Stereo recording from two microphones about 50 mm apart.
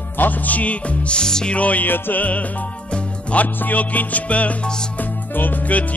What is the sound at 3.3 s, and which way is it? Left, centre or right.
Music, left.